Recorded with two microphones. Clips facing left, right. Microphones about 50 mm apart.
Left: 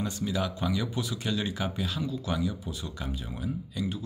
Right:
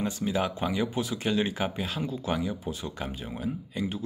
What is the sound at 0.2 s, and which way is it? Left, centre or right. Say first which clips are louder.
Speech: right 2 dB; right.